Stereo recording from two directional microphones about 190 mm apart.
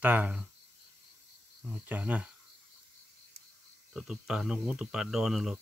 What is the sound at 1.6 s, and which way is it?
Speech, 10° right (ahead or behind).